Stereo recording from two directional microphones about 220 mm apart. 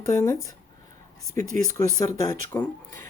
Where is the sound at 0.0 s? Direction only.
15° left (ahead or behind).